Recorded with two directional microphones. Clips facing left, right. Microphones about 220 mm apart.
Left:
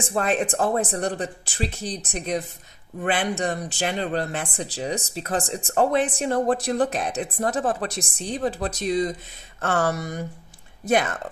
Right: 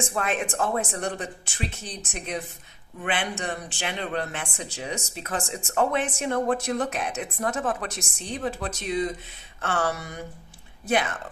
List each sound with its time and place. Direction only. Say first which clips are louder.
0.0 s speech: left 4 dB; 35° left (ahead or behind)